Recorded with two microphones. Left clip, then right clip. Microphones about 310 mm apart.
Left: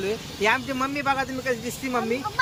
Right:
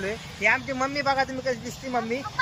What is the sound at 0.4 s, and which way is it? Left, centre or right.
Speech, centre.